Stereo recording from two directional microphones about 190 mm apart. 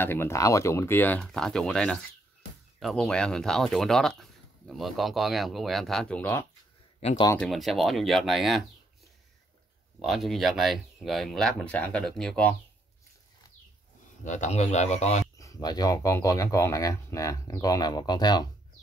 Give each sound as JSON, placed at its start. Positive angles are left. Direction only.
{"t": 0.0, "sound": "speech", "side_deg": 10}
{"t": 7.0, "sound": "speech", "side_deg": 35}
{"t": 7.3, "sound": "speech", "side_deg": 0}
{"t": 10.0, "sound": "speech", "side_deg": 0}
{"t": 14.2, "sound": "speech", "side_deg": 40}
{"t": 15.3, "sound": "speech", "side_deg": 20}